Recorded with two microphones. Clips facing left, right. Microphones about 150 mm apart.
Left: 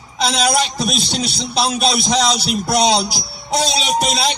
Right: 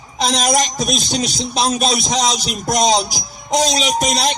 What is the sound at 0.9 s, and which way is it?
Speech, 45° right (ahead or behind).